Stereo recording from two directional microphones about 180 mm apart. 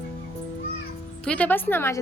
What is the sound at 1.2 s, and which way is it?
Speech, 10° left (ahead or behind).